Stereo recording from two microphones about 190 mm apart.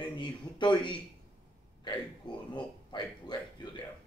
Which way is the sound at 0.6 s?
25° left (ahead or behind).